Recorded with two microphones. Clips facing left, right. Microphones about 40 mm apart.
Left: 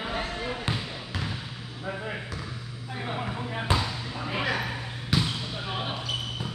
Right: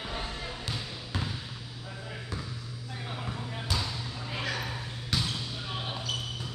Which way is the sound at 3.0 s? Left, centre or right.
Left.